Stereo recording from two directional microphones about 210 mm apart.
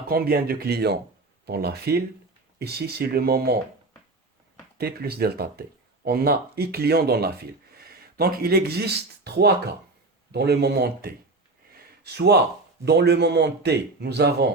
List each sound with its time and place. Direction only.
0.1 s speech: 45° right (ahead or behind)
4.8 s speech: 50° right (ahead or behind)